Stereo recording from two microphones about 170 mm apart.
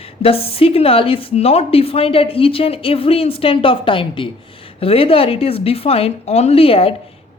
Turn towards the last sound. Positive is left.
turn(degrees=35)  # may be behind; listen again after turning